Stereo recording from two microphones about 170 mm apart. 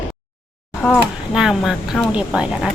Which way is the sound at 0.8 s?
Centre (ahead or behind).